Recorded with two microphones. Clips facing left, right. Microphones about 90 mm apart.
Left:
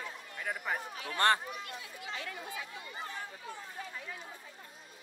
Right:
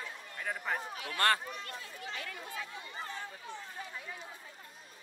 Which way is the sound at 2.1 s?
25° left (ahead or behind).